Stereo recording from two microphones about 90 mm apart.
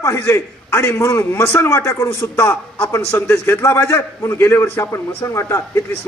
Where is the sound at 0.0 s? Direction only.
30° left (ahead or behind).